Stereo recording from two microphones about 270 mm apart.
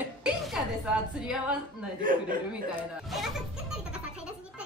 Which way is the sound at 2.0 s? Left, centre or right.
Right.